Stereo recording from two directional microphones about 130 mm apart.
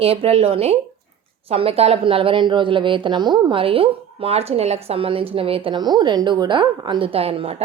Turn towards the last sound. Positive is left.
turn(degrees=-50)  # may be behind; listen again after turning